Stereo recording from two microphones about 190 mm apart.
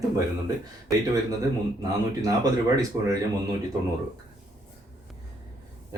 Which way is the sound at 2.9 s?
15° right (ahead or behind).